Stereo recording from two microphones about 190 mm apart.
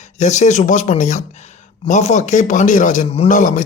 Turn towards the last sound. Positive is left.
turn(degrees=40)  # may be behind; listen again after turning